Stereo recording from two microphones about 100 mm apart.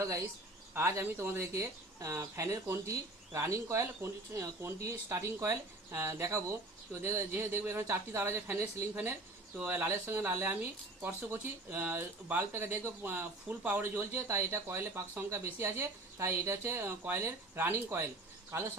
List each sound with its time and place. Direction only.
0.7 s speech: 25° right (ahead or behind)